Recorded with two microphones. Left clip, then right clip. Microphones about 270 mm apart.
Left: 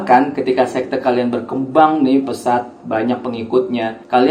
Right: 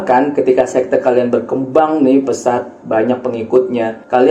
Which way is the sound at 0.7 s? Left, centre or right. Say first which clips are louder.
Right 5 dB; left.